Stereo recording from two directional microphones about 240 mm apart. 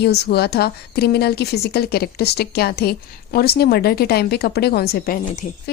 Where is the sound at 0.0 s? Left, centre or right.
Left.